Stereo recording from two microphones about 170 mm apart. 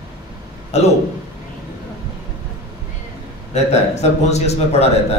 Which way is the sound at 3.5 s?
40° left (ahead or behind).